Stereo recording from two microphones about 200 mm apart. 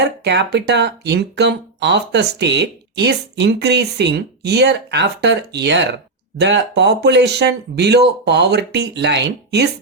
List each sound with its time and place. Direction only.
0.0 s speech: 55° right (ahead or behind)